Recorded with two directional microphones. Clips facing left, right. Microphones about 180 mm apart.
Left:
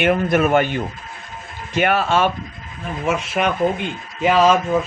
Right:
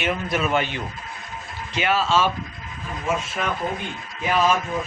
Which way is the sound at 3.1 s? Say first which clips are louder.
Left 5 dB; 75° left (ahead or behind).